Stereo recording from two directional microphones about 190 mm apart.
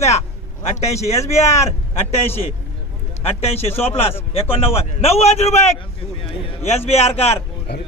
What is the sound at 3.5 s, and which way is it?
Speech, 30° left (ahead or behind).